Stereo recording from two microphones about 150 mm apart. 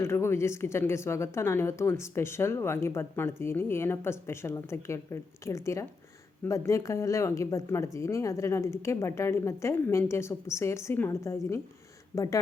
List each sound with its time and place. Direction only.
0.0 s speech: 15° left (ahead or behind)